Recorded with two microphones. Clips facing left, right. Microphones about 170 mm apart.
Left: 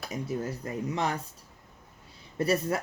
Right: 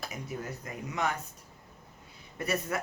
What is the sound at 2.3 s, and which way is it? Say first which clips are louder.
Speech: left 6 dB; 30° left (ahead or behind).